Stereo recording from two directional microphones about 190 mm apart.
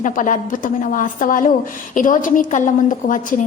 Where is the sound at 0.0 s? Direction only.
45° left (ahead or behind).